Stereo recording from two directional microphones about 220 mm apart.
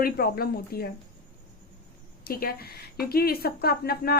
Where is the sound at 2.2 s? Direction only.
45° left (ahead or behind).